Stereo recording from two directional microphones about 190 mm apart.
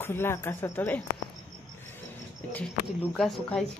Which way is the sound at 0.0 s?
10° left (ahead or behind).